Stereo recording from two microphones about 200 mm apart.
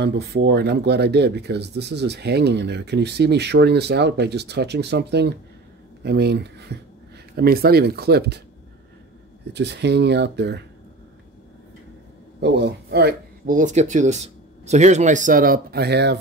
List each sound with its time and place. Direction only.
0.0 s speech: 55° right (ahead or behind)
9.5 s speech: 60° right (ahead or behind)
12.4 s speech: 60° right (ahead or behind)